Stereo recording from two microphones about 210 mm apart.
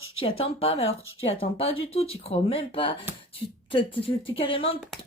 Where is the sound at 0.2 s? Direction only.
25° left (ahead or behind).